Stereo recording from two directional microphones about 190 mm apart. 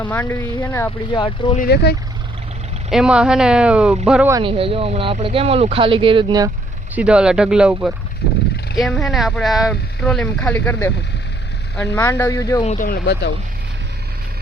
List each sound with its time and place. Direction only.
0.0 s speech: 10° left (ahead or behind)
1.2 s speech: 25° left (ahead or behind)
1.5 s speech: 55° left (ahead or behind)
2.9 s speech: 5° right (ahead or behind)
4.3 s speech: 25° right (ahead or behind)
6.9 s speech: 5° right (ahead or behind); by 10.9 s 10° left (ahead or behind)
11.9 s speech: 15° left (ahead or behind)
12.6 s speech: 45° left (ahead or behind)